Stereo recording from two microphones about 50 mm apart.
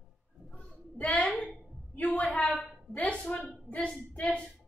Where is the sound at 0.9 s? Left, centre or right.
Left.